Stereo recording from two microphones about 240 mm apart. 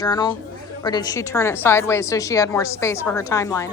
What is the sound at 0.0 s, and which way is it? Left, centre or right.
A woman's voice, centre.